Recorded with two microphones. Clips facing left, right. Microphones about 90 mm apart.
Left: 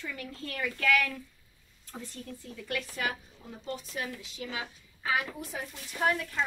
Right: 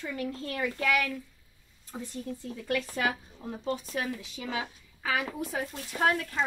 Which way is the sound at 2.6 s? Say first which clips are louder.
Right 5 dB; 40° right (ahead or behind).